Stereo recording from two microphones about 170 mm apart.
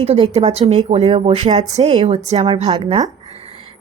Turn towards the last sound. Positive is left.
turn(degrees=-30)  # may be behind; listen again after turning